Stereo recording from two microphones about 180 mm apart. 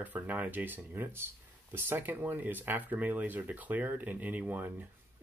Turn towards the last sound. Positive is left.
turn(degrees=-10)  # may be behind; listen again after turning